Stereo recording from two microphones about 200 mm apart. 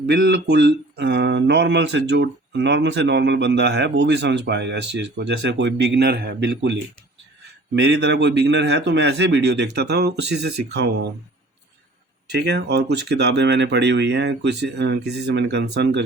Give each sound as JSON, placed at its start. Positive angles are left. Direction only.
{"t": 0.1, "sound": "speech", "side_deg": -55}
{"t": 7.9, "sound": "speech", "side_deg": -55}
{"t": 12.3, "sound": "speech", "side_deg": -60}